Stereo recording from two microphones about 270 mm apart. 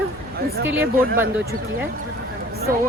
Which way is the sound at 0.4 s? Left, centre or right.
Right.